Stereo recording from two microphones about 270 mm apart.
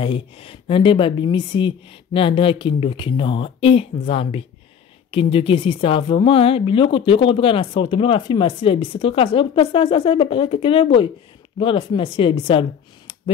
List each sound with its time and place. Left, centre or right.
0.0 s speech: centre